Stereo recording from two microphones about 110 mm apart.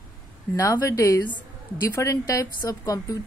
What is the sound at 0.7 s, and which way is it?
A woman's voice, 30° left (ahead or behind).